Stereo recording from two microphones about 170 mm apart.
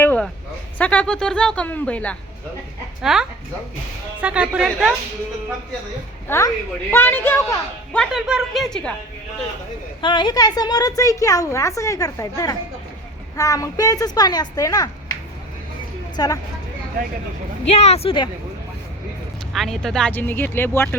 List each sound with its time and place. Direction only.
0.0 s a sound: 10° left (ahead or behind)
0.8 s a woman's voice: 5° left (ahead or behind)
3.0 s a woman's voice: centre (ahead or behind)
6.2 s a woman's voice: 15° left (ahead or behind)
7.9 s a woman's voice: centre (ahead or behind)
10.0 s a woman's voice: 25° left (ahead or behind)
16.1 s a woman's voice: 20° left (ahead or behind)
17.7 s speech: 40° left (ahead or behind)
19.5 s a woman's voice: centre (ahead or behind)